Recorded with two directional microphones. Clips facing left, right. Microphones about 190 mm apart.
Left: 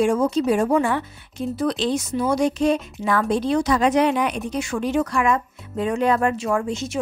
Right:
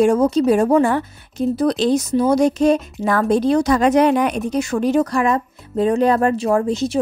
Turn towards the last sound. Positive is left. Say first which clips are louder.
# right 6 dB
turn(degrees=-35)  # may be behind; listen again after turning